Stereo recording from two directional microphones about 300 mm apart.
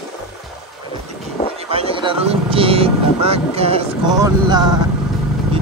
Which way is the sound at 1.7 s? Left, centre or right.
Centre.